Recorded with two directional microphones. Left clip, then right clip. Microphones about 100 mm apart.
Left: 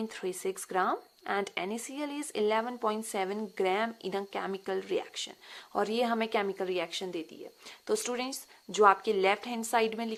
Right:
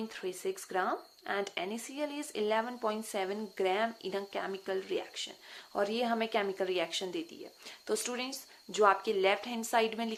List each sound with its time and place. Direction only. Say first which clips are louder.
0.1 s speech: left 2 dB; 45° left (ahead or behind)